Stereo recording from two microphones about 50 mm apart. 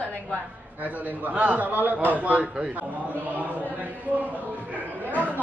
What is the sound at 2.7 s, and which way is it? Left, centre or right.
A man's voice, right.